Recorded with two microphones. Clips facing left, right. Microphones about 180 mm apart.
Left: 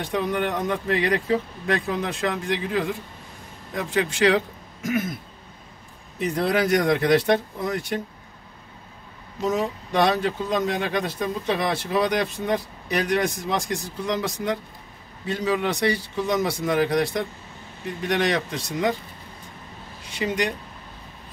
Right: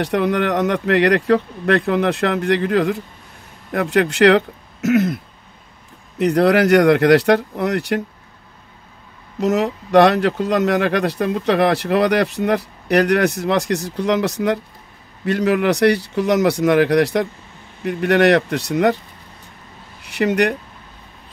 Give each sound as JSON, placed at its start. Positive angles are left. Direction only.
{"t": 0.0, "sound": "speech", "side_deg": -75}
{"t": 9.4, "sound": "speech", "side_deg": -75}
{"t": 20.0, "sound": "speech", "side_deg": -70}